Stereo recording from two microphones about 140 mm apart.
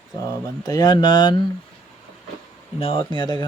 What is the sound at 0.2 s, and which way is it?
Speech, 25° left (ahead or behind).